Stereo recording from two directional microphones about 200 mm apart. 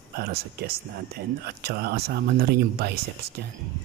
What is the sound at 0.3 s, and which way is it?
Speech, 50° right (ahead or behind).